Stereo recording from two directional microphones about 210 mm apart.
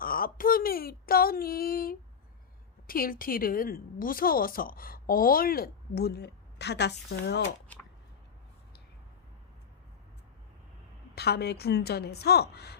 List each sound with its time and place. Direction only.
0.0 s a sound: 45° left (ahead or behind)
2.8 s speech: 45° left (ahead or behind)
11.1 s speech: 50° left (ahead or behind)